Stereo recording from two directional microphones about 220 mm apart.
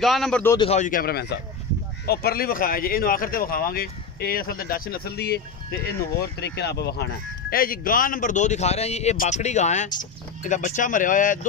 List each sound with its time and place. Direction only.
0.0 s a man's voice: centre (ahead or behind)
0.6 s speech: 30° left (ahead or behind)